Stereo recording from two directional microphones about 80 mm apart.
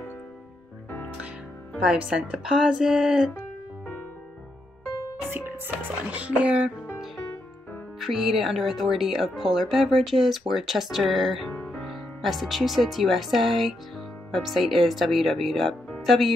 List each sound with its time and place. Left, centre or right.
1.9 s speech: centre
5.3 s music: right
8.0 s speech: centre